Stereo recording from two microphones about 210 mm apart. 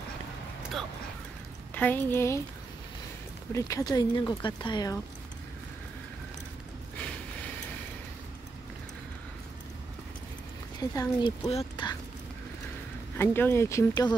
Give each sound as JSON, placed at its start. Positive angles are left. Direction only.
{"t": 1.8, "sound": "speech", "side_deg": 10}
{"t": 3.5, "sound": "speech", "side_deg": 15}
{"t": 10.8, "sound": "speech", "side_deg": 20}
{"t": 13.2, "sound": "speech", "side_deg": 10}